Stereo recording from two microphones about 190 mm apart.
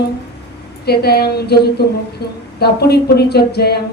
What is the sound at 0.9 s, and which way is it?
A woman's voice, 55° left (ahead or behind).